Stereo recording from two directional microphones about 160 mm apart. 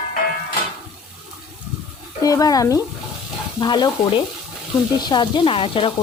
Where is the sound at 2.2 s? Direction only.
20° left (ahead or behind).